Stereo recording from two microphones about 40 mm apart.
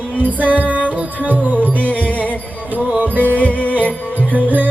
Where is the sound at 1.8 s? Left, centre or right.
Left.